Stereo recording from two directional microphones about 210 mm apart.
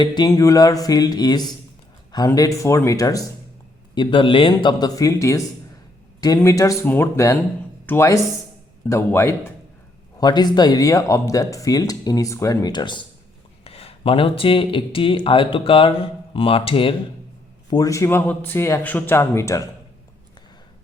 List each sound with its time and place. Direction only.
0.0 s speech: 20° left (ahead or behind)